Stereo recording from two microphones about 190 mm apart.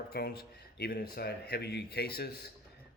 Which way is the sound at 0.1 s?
55° left (ahead or behind).